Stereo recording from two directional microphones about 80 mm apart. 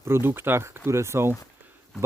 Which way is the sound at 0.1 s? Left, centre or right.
Right.